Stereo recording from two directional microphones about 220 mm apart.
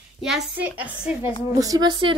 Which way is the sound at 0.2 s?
5° right (ahead or behind).